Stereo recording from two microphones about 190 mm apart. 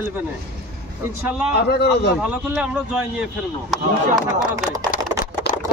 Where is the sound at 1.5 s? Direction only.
60° left (ahead or behind).